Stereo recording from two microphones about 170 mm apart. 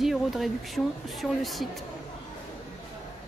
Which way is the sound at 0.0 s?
Centre (ahead or behind).